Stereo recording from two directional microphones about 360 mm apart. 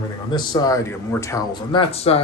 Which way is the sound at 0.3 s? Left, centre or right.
Centre.